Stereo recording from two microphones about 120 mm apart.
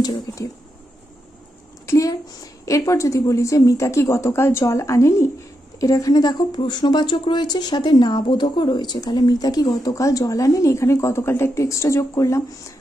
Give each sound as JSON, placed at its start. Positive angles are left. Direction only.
{"t": 0.0, "sound": "a woman's voice", "side_deg": 35}
{"t": 1.9, "sound": "a woman's voice", "side_deg": 30}